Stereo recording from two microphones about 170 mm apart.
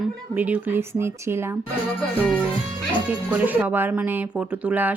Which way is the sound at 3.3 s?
10° right (ahead or behind).